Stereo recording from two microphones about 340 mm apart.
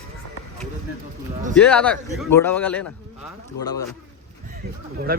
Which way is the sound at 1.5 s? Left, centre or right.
Centre.